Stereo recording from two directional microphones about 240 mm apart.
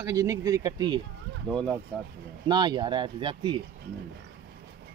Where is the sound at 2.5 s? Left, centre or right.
Centre.